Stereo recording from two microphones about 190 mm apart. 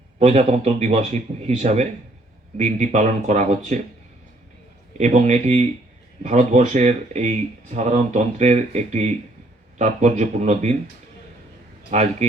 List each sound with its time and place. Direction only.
0.2 s speech: 35° right (ahead or behind)
4.9 s speech: 35° right (ahead or behind)
11.9 s speech: 35° right (ahead or behind)